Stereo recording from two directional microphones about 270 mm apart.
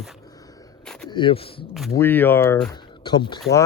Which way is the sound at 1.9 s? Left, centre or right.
Centre.